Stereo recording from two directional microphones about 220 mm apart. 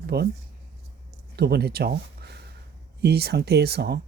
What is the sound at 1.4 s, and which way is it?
Speech, 45° right (ahead or behind).